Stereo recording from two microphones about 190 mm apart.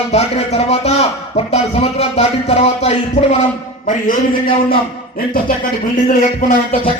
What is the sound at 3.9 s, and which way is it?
Speech, 45° left (ahead or behind).